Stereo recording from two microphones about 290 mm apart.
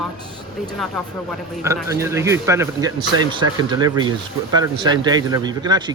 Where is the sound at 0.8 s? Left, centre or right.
Centre.